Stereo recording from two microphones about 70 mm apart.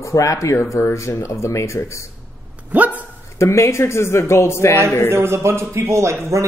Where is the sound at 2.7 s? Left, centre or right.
Right.